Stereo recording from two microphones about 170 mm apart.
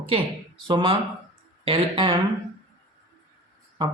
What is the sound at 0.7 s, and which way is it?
Speech, 25° right (ahead or behind).